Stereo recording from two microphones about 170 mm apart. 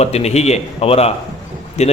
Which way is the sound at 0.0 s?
40° left (ahead or behind).